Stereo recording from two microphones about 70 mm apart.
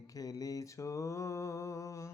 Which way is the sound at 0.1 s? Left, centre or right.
Left.